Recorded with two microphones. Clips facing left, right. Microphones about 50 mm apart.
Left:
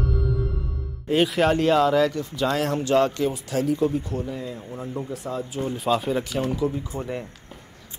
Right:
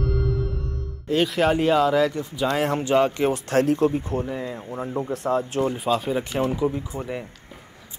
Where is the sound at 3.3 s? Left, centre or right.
Right.